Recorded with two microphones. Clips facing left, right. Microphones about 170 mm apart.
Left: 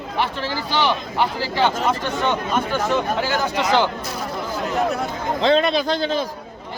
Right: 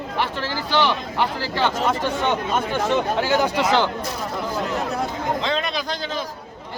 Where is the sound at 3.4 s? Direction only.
10° right (ahead or behind).